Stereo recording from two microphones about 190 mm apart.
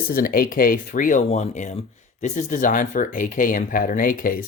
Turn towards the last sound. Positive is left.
turn(degrees=45)  # may be behind; listen again after turning